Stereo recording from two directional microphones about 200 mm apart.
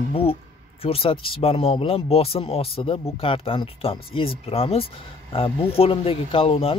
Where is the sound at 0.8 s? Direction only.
30° left (ahead or behind).